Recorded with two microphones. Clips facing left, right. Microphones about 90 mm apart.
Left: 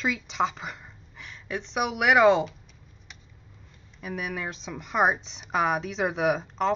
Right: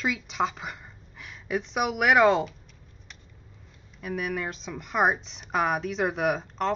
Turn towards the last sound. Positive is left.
turn(degrees=0)  # may be behind; listen again after turning